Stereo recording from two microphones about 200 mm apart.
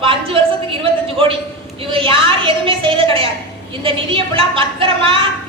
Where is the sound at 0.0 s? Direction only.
25° right (ahead or behind).